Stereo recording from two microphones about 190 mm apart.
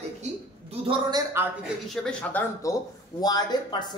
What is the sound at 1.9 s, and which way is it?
Speech, 5° left (ahead or behind).